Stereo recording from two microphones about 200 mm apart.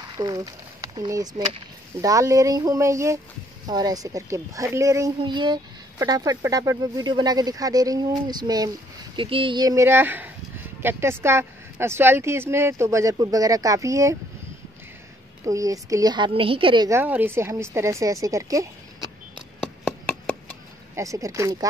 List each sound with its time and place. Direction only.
0.2 s a child's voice: 20° right (ahead or behind)
15.4 s a child's voice: 15° right (ahead or behind)
17.0 s speech: 10° right (ahead or behind)
19.6 s chopping: 5° left (ahead or behind)
20.9 s speech: 15° right (ahead or behind)